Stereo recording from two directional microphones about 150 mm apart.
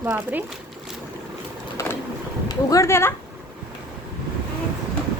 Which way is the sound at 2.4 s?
20° left (ahead or behind).